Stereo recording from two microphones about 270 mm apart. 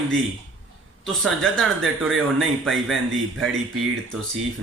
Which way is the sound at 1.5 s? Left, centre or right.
Centre.